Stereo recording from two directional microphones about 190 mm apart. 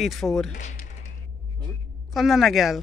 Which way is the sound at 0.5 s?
40° left (ahead or behind).